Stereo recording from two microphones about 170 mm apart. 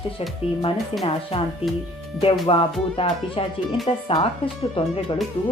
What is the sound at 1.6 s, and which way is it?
Speech, 35° left (ahead or behind).